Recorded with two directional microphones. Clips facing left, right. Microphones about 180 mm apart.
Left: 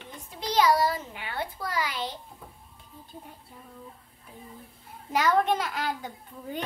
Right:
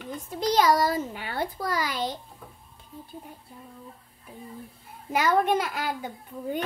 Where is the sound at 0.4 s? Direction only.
45° right (ahead or behind).